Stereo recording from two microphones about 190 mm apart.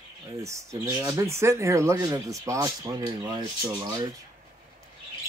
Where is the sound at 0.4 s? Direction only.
15° right (ahead or behind).